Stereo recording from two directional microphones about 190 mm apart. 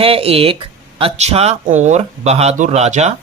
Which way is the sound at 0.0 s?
30° right (ahead or behind).